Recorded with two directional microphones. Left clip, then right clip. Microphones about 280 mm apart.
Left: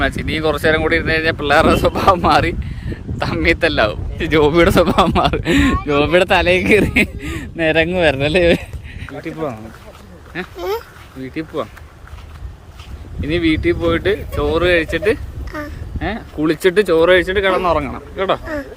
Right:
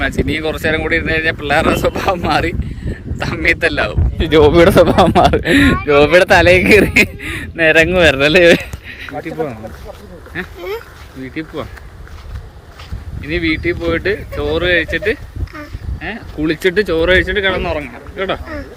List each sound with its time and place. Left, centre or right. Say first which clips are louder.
0.3 s speech: left 1 dB; centre
10.6 s a sound: left 2 dB; left
13.2 s speech: left 1 dB; centre